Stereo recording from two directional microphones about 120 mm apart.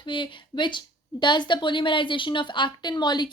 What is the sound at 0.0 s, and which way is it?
A woman's voice, 45° left (ahead or behind).